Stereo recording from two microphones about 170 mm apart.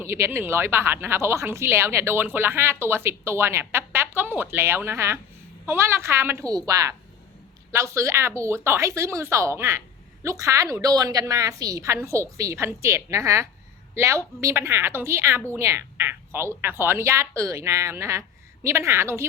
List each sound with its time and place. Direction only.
0.0 s a woman's voice: 15° right (ahead or behind)